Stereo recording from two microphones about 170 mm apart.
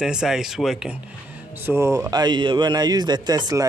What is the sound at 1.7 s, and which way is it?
Speech, 15° right (ahead or behind).